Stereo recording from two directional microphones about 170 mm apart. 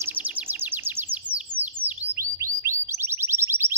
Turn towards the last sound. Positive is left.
turn(degrees=-15)  # may be behind; listen again after turning